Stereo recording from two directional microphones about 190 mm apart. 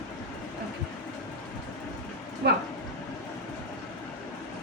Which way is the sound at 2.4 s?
60° right (ahead or behind).